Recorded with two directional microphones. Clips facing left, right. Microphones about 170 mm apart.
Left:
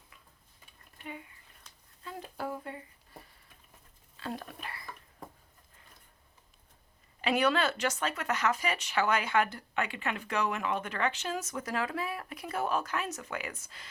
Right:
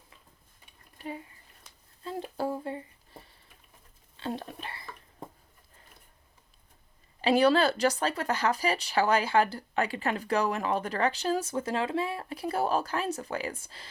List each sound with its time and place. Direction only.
0.9 s speech: 35° right (ahead or behind)
2.0 s a sound: 30° right (ahead or behind)
4.2 s whispering: 25° right (ahead or behind)
7.2 s speech: 30° right (ahead or behind)